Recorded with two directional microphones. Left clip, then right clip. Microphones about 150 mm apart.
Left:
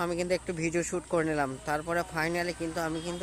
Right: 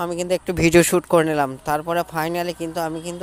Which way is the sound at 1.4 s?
45° right (ahead or behind).